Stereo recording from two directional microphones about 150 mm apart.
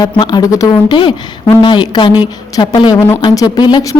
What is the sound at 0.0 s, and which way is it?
A woman's voice, 30° left (ahead or behind).